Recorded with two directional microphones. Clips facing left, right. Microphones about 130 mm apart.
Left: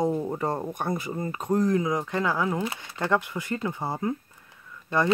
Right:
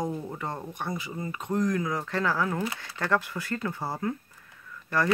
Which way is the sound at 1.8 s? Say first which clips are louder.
Left 3 dB; 15° left (ahead or behind).